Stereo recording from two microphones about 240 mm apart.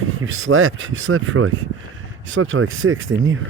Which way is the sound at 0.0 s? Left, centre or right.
Right.